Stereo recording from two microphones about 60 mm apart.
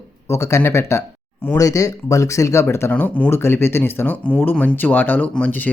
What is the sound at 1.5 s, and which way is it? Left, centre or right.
Speech, left.